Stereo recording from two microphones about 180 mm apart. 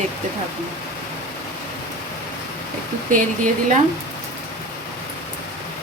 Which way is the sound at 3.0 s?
45° right (ahead or behind).